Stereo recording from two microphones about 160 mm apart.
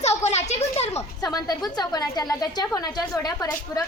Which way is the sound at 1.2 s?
25° left (ahead or behind).